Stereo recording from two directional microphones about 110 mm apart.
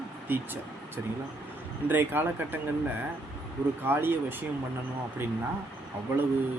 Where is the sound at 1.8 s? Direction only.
15° right (ahead or behind).